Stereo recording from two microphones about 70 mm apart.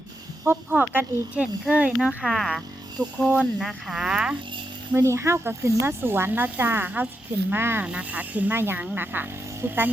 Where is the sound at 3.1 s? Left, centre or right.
Centre.